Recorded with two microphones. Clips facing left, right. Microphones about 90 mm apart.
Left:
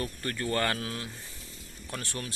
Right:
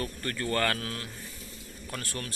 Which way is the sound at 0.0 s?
20° left (ahead or behind).